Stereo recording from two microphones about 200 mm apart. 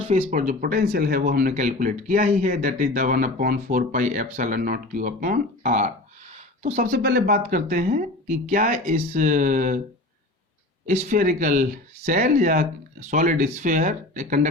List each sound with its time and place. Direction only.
0.1 s speech: 40° right (ahead or behind)
10.8 s speech: 40° right (ahead or behind)